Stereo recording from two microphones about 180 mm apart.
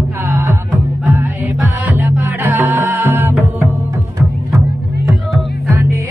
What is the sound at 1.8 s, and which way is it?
Music, 10° right (ahead or behind).